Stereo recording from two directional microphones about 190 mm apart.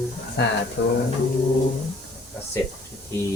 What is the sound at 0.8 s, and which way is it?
Speech, 65° left (ahead or behind).